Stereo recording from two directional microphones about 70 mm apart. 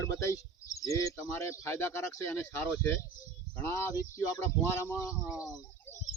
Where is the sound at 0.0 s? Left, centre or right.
Left.